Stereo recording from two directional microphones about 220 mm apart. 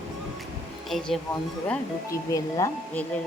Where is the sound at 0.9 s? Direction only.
5° left (ahead or behind).